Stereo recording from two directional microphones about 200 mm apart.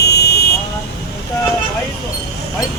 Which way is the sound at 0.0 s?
55° left (ahead or behind).